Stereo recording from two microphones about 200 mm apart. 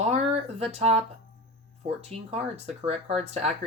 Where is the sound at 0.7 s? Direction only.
30° right (ahead or behind).